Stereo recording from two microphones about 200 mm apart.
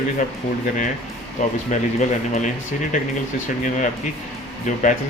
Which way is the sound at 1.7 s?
35° left (ahead or behind).